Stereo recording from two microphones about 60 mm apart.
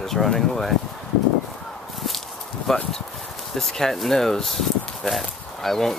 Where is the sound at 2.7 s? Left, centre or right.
Centre.